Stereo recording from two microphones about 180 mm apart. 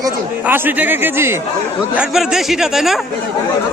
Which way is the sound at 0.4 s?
10° right (ahead or behind).